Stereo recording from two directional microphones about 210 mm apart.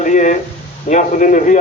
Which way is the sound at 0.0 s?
35° left (ahead or behind).